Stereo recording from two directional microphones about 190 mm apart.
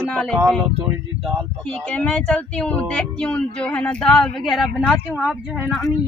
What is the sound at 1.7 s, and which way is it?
Speech, 5° left (ahead or behind).